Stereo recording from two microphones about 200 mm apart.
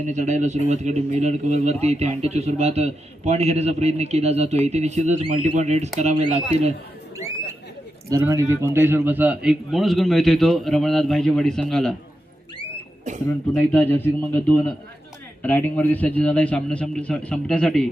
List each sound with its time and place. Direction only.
0.0 s a man's voice: 35° right (ahead or behind)
8.1 s a man's voice: 15° right (ahead or behind); by 11.9 s centre (ahead or behind)
13.5 s a man's voice: 10° left (ahead or behind)